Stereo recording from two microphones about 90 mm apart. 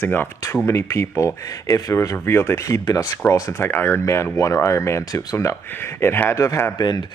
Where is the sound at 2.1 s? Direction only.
25° left (ahead or behind).